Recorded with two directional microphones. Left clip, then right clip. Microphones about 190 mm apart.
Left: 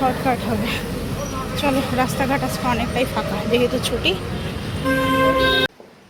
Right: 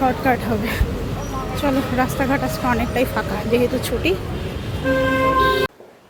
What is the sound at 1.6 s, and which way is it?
Speech, 15° right (ahead or behind).